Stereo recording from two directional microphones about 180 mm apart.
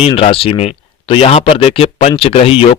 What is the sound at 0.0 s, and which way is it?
Speech, 30° left (ahead or behind).